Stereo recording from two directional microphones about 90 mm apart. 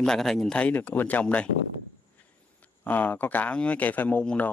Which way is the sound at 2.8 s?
20° left (ahead or behind).